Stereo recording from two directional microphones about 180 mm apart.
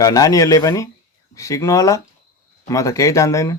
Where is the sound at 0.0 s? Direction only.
20° left (ahead or behind).